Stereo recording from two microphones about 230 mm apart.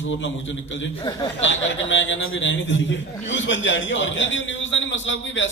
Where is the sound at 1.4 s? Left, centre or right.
Left.